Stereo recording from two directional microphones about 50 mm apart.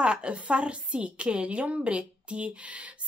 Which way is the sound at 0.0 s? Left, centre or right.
Centre.